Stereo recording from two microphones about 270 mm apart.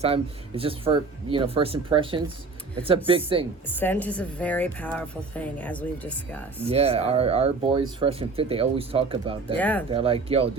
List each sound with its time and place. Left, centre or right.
0.0 s speech: right
3.8 s a woman's voice: centre
6.7 s speech: right
9.6 s a woman's voice: centre
9.9 s speech: right